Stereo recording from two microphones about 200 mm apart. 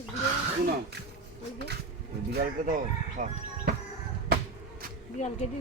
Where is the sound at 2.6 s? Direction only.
40° right (ahead or behind).